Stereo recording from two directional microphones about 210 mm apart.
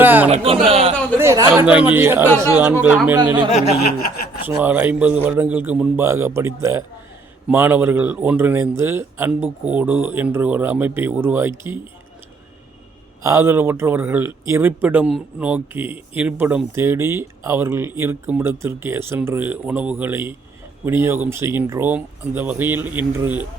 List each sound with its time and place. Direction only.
0.0 s a sound: 10° right (ahead or behind)
0.3 s speech: 25° right (ahead or behind)
1.2 s speech: 15° right (ahead or behind)
3.2 s speech: 20° right (ahead or behind)
13.2 s speech: 10° right (ahead or behind)